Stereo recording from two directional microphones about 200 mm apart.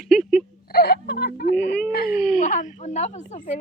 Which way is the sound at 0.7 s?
55° left (ahead or behind).